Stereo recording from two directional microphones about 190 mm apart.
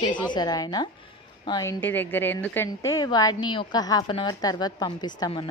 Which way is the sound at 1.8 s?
10° left (ahead or behind).